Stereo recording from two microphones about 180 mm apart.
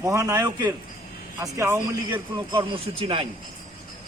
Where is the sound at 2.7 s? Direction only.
30° right (ahead or behind).